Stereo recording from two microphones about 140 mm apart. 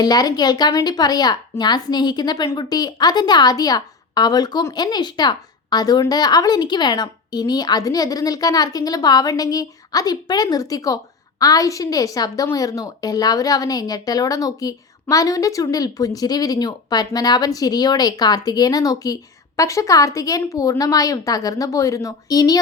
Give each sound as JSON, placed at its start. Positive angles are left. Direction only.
{"t": 0.0, "sound": "a woman's voice", "side_deg": 30}